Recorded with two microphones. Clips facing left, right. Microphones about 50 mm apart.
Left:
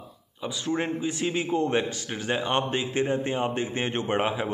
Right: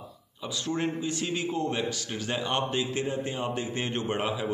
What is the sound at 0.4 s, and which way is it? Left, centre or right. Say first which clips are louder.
A man's voice: left 2 dB; left.